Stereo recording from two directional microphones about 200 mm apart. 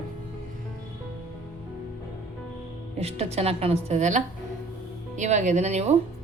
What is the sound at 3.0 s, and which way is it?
A woman's voice, 30° right (ahead or behind).